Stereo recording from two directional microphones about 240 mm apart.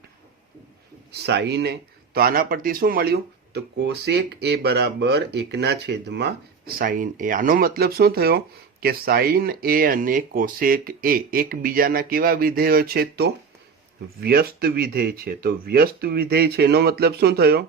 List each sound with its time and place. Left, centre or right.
1.1 s speech: right